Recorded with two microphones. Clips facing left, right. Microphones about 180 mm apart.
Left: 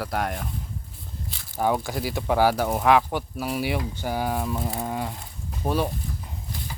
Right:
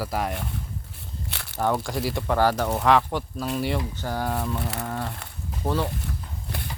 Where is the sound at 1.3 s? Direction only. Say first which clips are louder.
Right 3 dB; 70° right (ahead or behind).